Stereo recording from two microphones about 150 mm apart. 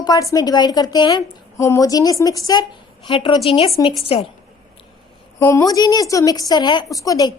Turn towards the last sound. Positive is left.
turn(degrees=25)  # may be behind; listen again after turning